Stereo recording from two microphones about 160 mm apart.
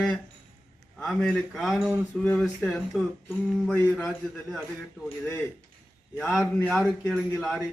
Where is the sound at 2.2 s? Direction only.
5° left (ahead or behind).